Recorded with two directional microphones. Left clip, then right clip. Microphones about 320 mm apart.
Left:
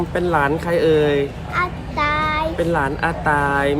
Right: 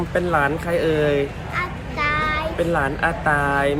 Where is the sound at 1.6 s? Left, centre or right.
Centre.